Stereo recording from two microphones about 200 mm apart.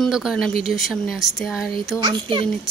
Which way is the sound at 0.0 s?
5° right (ahead or behind).